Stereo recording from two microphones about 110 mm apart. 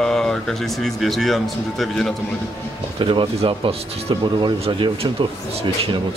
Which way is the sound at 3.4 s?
60° right (ahead or behind).